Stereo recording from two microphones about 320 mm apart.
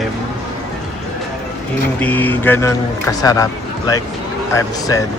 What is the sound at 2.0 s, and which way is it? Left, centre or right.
Speech, centre.